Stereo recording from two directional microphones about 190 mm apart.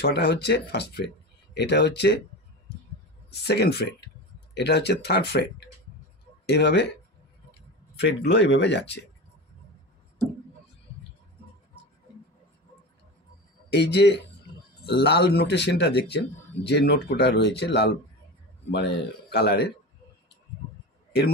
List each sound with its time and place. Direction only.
0.0 s speech: 60° left (ahead or behind)
3.3 s speech: 60° left (ahead or behind)
8.0 s speech: 65° left (ahead or behind)
13.7 s speech: 60° left (ahead or behind)